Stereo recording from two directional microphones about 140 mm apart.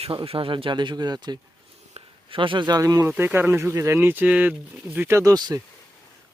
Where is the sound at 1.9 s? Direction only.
40° right (ahead or behind); by 3.1 s 25° right (ahead or behind).